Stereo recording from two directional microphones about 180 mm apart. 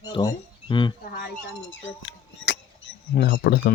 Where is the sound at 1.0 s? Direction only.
55° left (ahead or behind).